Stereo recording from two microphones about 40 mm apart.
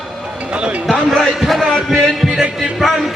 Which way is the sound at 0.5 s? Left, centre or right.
Right.